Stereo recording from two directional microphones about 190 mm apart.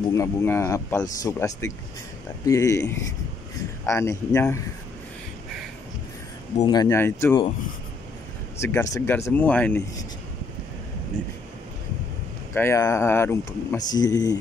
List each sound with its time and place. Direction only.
0.1 s speech: 15° left (ahead or behind)
6.6 s speech: 20° left (ahead or behind)
8.5 s speech: 10° left (ahead or behind)
12.5 s speech: 15° left (ahead or behind)